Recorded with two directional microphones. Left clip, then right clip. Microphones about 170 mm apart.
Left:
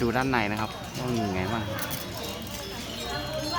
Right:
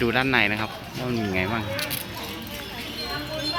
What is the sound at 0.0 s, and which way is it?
Speech, 5° right (ahead or behind).